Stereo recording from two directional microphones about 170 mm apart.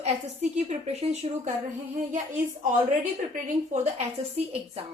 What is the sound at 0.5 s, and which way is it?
Speech, 40° right (ahead or behind).